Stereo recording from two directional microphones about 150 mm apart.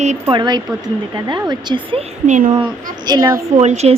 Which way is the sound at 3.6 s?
45° right (ahead or behind).